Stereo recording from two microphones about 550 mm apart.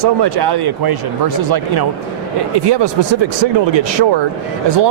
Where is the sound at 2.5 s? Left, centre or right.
Right.